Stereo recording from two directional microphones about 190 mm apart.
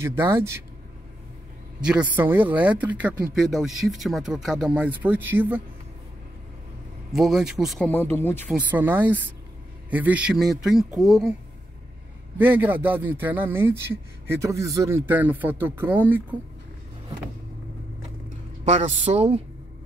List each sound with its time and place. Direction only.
0.0 s a man's voice: 15° right (ahead or behind)
1.9 s a man's voice: 5° right (ahead or behind)
7.1 s speech: centre (ahead or behind)
7.9 s speech: 10° left (ahead or behind)
8.5 s a man's voice: 10° right (ahead or behind)
12.4 s a man's voice: 10° right (ahead or behind)
18.7 s a man's voice: 35° right (ahead or behind)